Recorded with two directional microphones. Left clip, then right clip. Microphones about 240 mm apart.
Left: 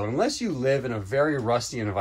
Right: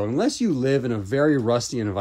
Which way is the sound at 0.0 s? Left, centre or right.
Right.